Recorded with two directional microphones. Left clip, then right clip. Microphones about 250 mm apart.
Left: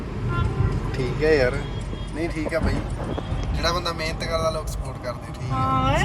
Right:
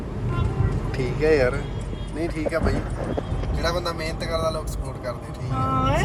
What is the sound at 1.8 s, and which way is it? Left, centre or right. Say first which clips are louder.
Music: even; centre.